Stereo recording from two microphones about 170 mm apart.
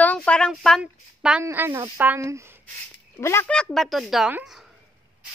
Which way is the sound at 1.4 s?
15° right (ahead or behind).